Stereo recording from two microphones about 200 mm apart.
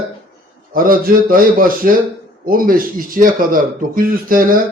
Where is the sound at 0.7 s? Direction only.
45° right (ahead or behind).